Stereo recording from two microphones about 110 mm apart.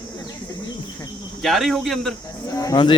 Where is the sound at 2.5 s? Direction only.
30° left (ahead or behind).